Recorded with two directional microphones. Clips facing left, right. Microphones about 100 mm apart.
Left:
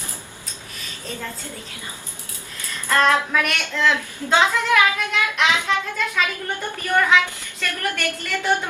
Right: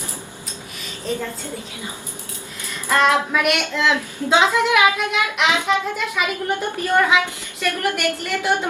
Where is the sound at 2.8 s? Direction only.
15° right (ahead or behind).